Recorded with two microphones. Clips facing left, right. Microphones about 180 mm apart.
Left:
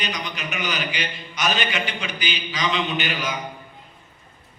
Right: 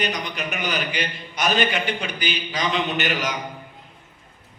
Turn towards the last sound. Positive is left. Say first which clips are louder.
# right 2 dB
turn(degrees=-70)  # may be behind; listen again after turning